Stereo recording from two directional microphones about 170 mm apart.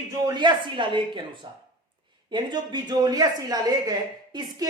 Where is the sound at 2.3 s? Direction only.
25° right (ahead or behind).